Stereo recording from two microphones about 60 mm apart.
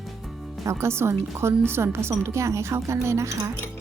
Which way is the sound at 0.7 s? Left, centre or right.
Right.